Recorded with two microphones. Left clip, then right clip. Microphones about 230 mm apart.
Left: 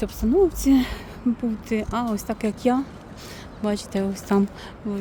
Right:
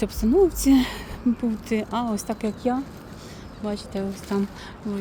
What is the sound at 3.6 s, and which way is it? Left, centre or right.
Speech, centre.